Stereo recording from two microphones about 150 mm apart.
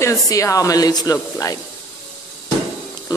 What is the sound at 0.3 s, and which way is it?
Speech, 20° left (ahead or behind).